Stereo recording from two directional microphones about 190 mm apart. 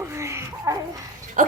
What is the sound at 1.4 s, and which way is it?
Dog, 45° right (ahead or behind).